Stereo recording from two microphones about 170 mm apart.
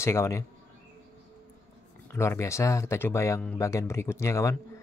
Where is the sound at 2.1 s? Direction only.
15° left (ahead or behind).